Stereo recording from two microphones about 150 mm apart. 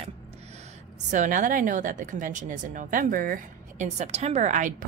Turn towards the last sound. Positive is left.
turn(degrees=-55)  # may be behind; listen again after turning